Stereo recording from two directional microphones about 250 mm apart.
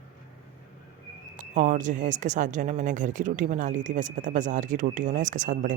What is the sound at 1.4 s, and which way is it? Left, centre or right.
Speech, right.